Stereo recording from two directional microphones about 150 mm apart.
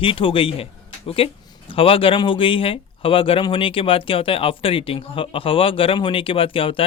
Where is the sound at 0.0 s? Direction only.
35° left (ahead or behind).